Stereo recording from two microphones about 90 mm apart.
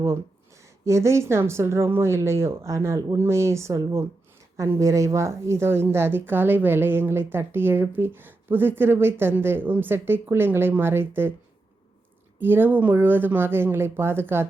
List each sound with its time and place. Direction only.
0.9 s speech: 30° right (ahead or behind)
12.4 s speech: 25° right (ahead or behind)